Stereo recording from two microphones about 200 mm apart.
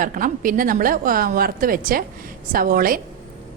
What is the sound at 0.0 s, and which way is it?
A woman's voice, 45° right (ahead or behind).